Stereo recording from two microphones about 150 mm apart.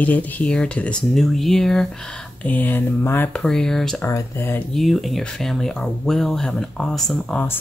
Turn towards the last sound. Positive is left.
turn(degrees=5)  # may be behind; listen again after turning